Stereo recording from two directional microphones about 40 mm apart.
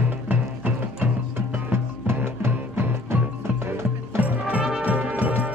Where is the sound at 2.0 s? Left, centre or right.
Right.